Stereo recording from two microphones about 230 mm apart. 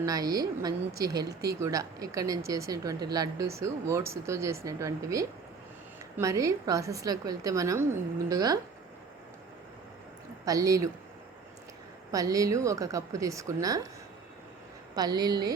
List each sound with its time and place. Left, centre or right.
0.0 s speech: centre
10.4 s speech: centre
12.1 s speech: centre
14.9 s speech: centre